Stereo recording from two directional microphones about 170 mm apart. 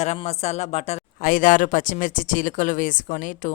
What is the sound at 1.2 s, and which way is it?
A woman's voice, 50° left (ahead or behind).